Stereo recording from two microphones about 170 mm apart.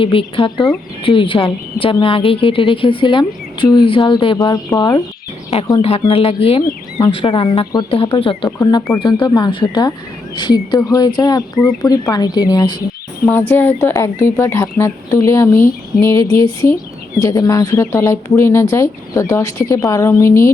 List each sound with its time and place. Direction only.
0.0 s a woman's voice: 30° left (ahead or behind)
5.8 s speech: 35° left (ahead or behind)
8.4 s a woman's voice: 20° left (ahead or behind)
13.5 s speech: 10° left (ahead or behind)